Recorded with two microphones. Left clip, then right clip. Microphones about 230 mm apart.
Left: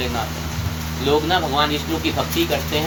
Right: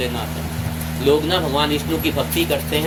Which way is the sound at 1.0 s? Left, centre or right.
Centre.